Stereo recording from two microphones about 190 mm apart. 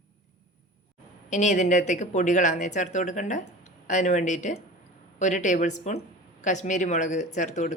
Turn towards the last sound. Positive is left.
turn(degrees=40)  # may be behind; listen again after turning